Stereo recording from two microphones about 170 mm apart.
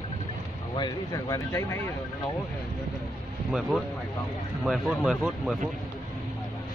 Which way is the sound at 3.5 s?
Centre (ahead or behind).